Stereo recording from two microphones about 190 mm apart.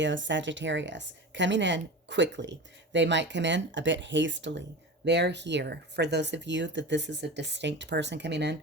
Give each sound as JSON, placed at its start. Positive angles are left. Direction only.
{"t": 0.0, "sound": "speech", "side_deg": -75}